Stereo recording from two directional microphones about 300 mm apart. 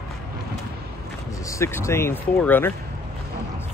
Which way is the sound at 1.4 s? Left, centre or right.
Centre.